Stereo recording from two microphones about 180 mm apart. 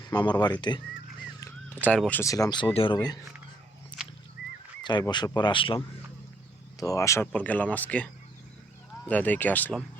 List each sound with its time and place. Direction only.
0.1 s speech: 25° left (ahead or behind)
1.4 s speech: 15° left (ahead or behind)
3.9 s a sound: 25° left (ahead or behind)
4.8 s speech: 25° left (ahead or behind)
6.7 s speech: 20° left (ahead or behind)